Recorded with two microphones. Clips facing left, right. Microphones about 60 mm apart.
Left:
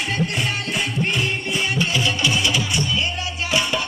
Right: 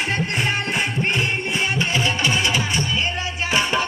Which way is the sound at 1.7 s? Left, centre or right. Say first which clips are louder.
Left 1 dB; right.